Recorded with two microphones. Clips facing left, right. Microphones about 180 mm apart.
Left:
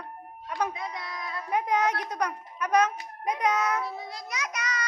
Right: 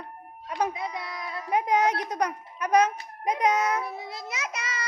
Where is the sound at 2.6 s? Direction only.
15° right (ahead or behind).